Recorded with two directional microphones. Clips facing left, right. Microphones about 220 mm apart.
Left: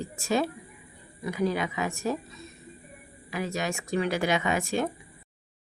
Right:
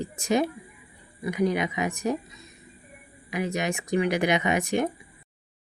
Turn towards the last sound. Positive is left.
turn(degrees=-20)  # may be behind; listen again after turning